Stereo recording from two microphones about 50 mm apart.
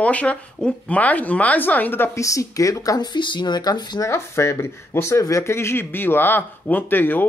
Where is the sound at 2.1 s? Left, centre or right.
Left.